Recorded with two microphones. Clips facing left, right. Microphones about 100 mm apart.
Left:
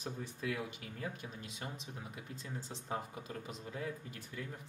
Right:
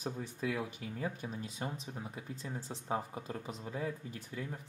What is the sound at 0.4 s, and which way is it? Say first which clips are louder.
Speech: right 3 dB; 30° right (ahead or behind).